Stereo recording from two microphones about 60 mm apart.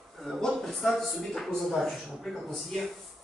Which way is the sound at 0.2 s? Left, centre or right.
Centre.